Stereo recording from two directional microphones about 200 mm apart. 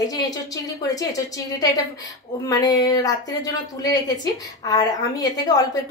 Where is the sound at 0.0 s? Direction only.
20° left (ahead or behind).